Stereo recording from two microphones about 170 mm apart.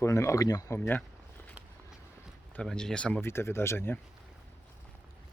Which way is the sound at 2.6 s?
5° left (ahead or behind).